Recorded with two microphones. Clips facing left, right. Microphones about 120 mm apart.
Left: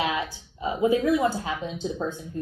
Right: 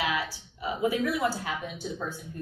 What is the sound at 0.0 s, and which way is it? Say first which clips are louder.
A woman's voice: left 3 dB; 25° left (ahead or behind).